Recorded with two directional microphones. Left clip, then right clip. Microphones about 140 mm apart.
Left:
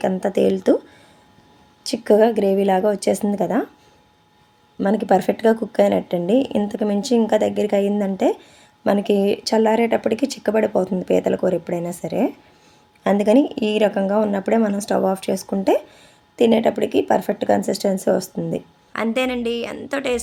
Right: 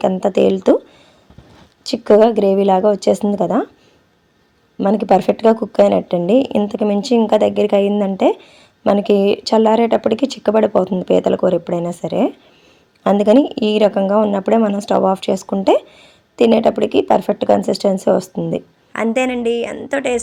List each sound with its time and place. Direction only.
1.9 s a woman's voice: 15° right (ahead or behind)
4.8 s a woman's voice: 15° right (ahead or behind)
15.1 s speech: 25° left (ahead or behind)
15.7 s a woman's voice: 20° right (ahead or behind)